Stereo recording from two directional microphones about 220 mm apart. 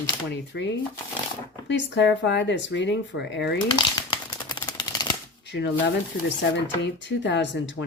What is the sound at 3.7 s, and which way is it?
Typewriter, 20° left (ahead or behind).